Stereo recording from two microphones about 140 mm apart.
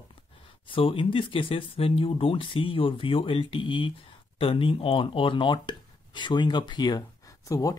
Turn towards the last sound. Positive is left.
turn(degrees=25)  # may be behind; listen again after turning